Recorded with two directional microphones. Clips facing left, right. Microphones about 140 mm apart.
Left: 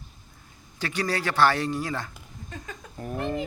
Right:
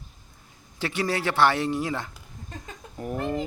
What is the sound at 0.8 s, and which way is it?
Speech, 25° right (ahead or behind).